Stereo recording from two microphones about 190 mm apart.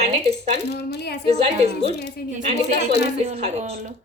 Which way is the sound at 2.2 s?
50° left (ahead or behind).